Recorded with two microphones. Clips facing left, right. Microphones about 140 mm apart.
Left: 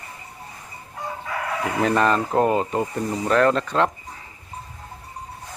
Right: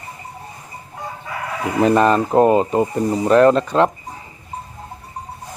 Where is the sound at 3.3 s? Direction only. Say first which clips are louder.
Right 6 dB; 20° right (ahead or behind).